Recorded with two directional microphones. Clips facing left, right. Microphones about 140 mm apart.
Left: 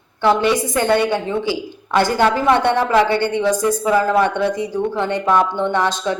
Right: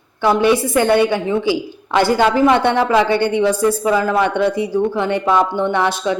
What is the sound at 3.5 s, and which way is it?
Speech, 15° left (ahead or behind).